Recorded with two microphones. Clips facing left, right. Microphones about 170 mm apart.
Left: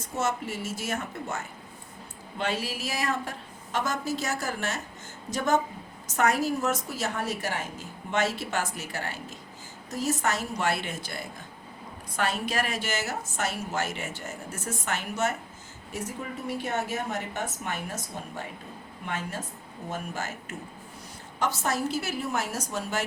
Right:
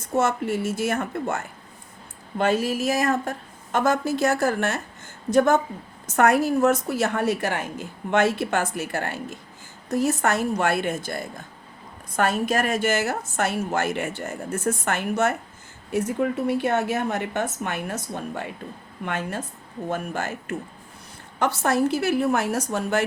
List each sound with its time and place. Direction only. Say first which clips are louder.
0.2 s a woman's voice: right 7 dB; 60° right (ahead or behind)